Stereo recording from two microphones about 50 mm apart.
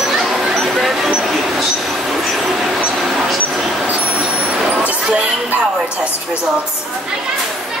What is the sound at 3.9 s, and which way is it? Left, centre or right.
Vehicle, right.